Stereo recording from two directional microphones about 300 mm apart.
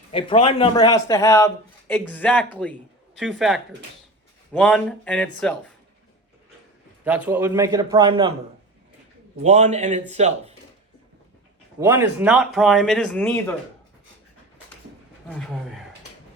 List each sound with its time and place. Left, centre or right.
0.1 s a man's voice: centre
7.0 s a man's voice: centre
9.4 s a man's voice: right
11.8 s speech: centre
15.3 s speech: centre